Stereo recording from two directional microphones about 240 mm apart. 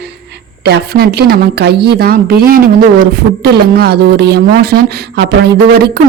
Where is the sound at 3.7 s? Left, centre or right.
Right.